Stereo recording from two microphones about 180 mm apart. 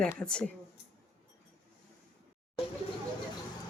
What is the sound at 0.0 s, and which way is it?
Speech, 5° left (ahead or behind).